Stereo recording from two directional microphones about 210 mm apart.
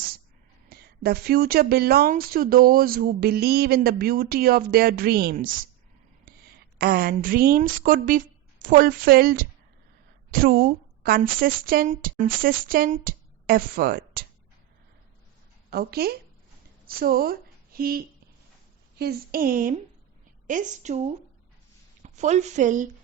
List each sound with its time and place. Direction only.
0.7 s speech: 50° right (ahead or behind)
6.7 s a woman's voice: 45° right (ahead or behind)
15.7 s a woman's voice: 50° right (ahead or behind)